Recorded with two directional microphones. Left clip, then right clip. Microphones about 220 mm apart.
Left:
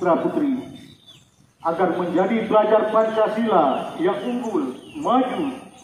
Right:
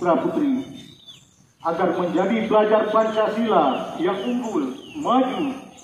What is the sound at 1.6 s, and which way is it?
A man's voice, 15° left (ahead or behind).